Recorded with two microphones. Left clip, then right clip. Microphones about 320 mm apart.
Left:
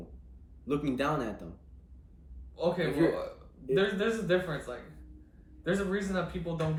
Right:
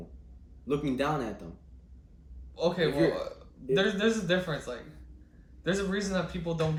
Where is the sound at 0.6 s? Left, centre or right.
Centre.